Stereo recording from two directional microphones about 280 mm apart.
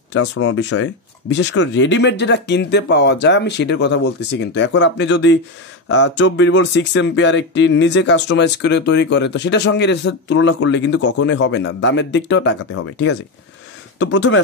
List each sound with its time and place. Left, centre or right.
0.1 s speech: left